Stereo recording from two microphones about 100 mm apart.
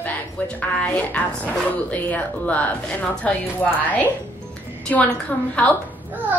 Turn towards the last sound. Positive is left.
turn(degrees=-15)  # may be behind; listen again after turning